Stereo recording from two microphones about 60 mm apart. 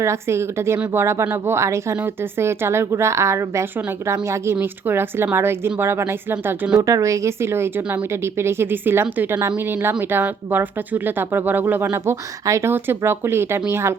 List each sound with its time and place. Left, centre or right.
0.0 s a woman's voice: right
2.0 s a woman's voice: right
4.6 s a woman's voice: right
6.7 s a woman's voice: right
12.5 s a woman's voice: right
13.0 s a woman's voice: right